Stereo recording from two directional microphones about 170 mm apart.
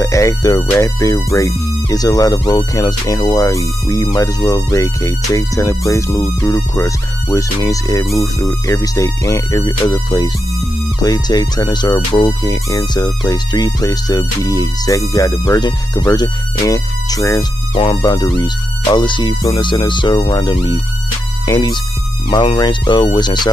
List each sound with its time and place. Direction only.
0.0 s speech: 20° left (ahead or behind)